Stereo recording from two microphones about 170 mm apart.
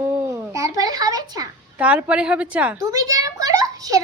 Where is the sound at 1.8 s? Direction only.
10° right (ahead or behind).